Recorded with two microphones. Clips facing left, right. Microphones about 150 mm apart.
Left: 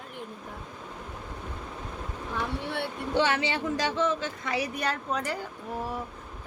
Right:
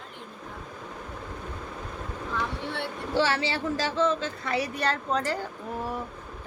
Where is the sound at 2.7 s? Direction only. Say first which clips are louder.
Even; 20° left (ahead or behind).